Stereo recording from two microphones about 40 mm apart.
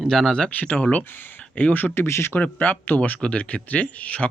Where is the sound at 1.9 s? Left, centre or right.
Left.